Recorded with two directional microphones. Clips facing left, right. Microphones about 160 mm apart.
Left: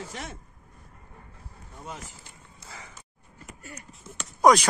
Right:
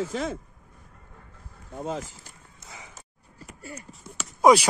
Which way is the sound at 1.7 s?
90° right.